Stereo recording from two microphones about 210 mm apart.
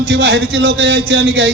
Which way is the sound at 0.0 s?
50° right (ahead or behind).